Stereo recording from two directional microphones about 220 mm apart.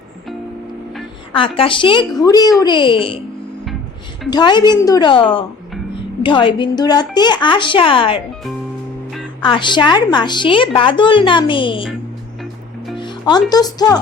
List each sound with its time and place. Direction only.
1.4 s a woman's voice: 25° left (ahead or behind)
4.3 s a woman's voice: 20° left (ahead or behind)
9.4 s a woman's voice: 20° left (ahead or behind)
13.0 s music: 20° left (ahead or behind)
13.5 s speech: 20° left (ahead or behind)